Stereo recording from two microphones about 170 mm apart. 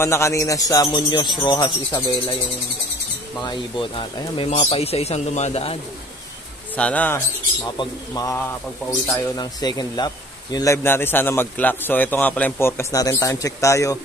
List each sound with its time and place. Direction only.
0.0 s a man's voice: 15° left (ahead or behind)
3.3 s a man's voice: 25° left (ahead or behind)
6.8 s a man's voice: 10° left (ahead or behind)
7.7 s a man's voice: 25° left (ahead or behind)